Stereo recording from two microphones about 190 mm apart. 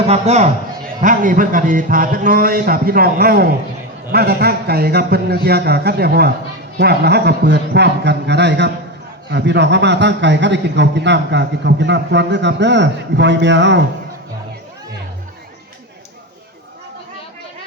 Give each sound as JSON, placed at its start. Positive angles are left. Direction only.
{"t": 0.0, "sound": "a man's voice", "side_deg": -35}